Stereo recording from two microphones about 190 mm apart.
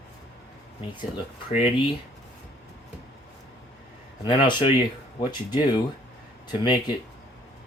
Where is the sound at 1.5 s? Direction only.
30° left (ahead or behind).